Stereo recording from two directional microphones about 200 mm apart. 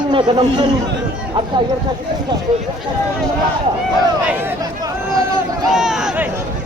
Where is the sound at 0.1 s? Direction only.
25° right (ahead or behind).